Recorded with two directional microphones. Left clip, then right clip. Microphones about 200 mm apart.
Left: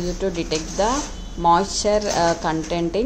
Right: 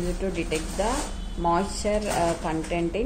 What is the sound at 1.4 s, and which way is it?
A woman's voice, 25° left (ahead or behind).